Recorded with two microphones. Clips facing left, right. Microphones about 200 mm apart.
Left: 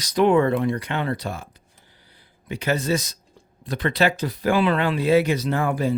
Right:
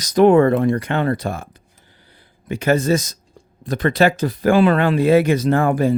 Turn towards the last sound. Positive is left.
turn(degrees=-50)  # may be behind; listen again after turning